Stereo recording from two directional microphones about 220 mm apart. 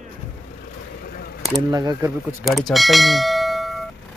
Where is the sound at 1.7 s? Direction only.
20° right (ahead or behind).